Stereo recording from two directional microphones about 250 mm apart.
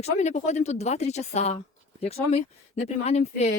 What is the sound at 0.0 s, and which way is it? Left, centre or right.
Speech, left.